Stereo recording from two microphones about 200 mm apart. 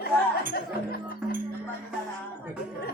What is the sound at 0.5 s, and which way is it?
Speech, 50° left (ahead or behind).